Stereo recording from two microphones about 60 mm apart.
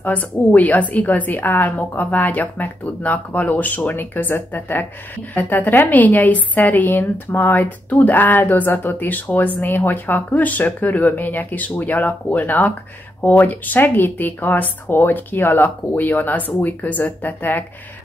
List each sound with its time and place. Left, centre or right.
0.0 s a woman's voice: left